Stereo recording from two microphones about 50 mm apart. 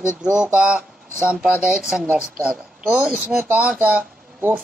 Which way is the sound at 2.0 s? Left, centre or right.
Centre.